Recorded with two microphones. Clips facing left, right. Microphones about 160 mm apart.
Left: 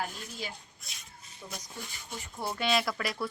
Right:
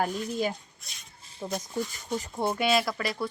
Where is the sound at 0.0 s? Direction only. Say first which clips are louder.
Right 10 dB; 50° right (ahead or behind).